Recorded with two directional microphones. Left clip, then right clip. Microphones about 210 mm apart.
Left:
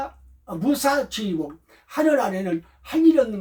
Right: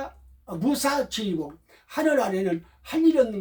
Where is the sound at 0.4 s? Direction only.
Centre (ahead or behind).